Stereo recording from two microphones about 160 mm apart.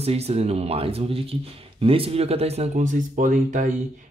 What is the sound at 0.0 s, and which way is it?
Speech, 40° right (ahead or behind).